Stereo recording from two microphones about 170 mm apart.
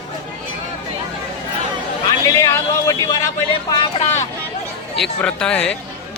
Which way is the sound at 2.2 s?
15° left (ahead or behind).